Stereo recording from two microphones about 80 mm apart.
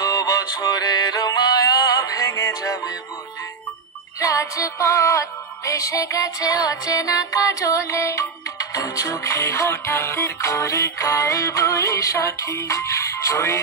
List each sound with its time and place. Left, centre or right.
0.0 s music: left
4.2 s music: left